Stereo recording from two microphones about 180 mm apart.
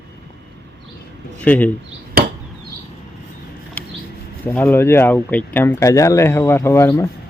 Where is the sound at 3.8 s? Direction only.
10° left (ahead or behind).